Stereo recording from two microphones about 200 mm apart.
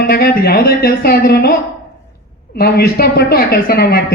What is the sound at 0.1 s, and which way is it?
A man's voice, 50° left (ahead or behind).